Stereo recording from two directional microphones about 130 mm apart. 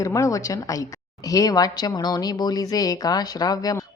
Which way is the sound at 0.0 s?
25° left (ahead or behind).